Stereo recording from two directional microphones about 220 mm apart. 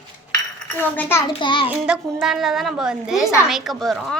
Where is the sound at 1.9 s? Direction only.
5° right (ahead or behind).